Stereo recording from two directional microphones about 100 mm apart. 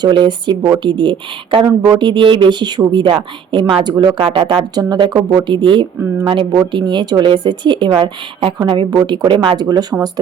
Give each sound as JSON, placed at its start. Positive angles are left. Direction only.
{"t": 0.0, "sound": "a woman's voice", "side_deg": -50}
{"t": 3.8, "sound": "a woman's voice", "side_deg": -45}